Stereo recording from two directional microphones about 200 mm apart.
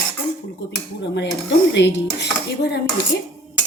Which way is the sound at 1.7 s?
60° left (ahead or behind).